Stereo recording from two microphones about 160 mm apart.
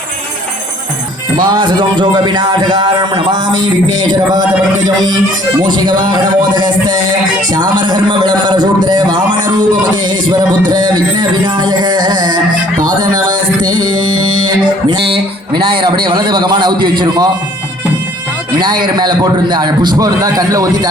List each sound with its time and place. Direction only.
1.4 s a man's voice: 25° right (ahead or behind)
13.1 s music: 30° right (ahead or behind)
18.6 s a man's voice: 30° right (ahead or behind)